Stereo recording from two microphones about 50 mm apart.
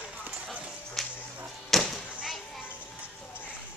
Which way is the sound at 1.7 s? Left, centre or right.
Centre.